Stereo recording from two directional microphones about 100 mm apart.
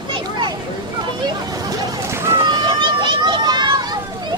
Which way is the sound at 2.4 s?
45° right (ahead or behind).